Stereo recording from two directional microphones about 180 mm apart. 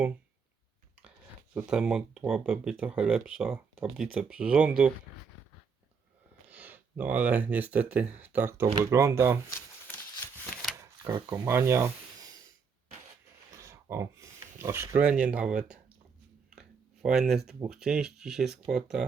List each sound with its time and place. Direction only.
1.5 s speech: 5° right (ahead or behind)
6.5 s speech: 10° right (ahead or behind)
11.3 s speech: 15° right (ahead or behind)
13.5 s speech: 15° right (ahead or behind)
16.6 s a sound: 5° right (ahead or behind)
17.7 s speech: 5° right (ahead or behind)